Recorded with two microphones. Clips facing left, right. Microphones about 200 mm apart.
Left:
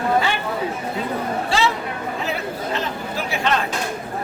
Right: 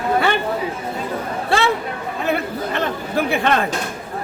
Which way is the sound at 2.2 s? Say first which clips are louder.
Right 7 dB; 55° right (ahead or behind).